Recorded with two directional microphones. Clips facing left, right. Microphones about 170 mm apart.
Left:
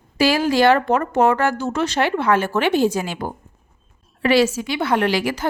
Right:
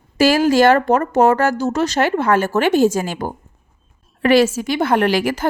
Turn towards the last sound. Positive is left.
turn(degrees=-50)  # may be behind; listen again after turning